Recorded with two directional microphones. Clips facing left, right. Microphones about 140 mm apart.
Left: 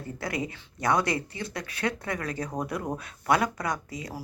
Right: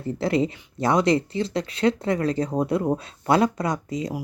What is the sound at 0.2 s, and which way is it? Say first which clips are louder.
Speech: right 10 dB; 25° right (ahead or behind).